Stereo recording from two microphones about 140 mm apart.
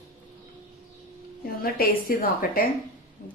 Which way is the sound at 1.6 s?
85° left.